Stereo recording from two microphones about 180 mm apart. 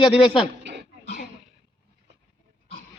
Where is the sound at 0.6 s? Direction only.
70° right (ahead or behind).